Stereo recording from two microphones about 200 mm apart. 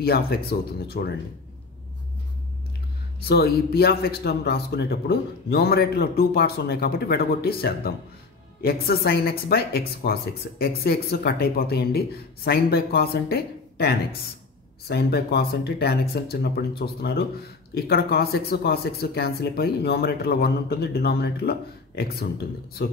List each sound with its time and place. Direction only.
0.0 s speech: 50° left (ahead or behind)
3.2 s speech: 50° left (ahead or behind)